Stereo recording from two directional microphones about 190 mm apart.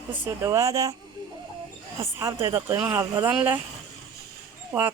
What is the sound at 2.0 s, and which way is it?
Speech, 15° right (ahead or behind).